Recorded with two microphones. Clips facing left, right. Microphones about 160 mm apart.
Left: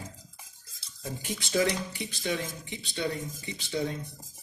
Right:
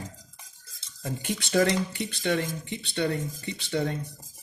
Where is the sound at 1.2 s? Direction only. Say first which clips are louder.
Right 3 dB; 65° right (ahead or behind).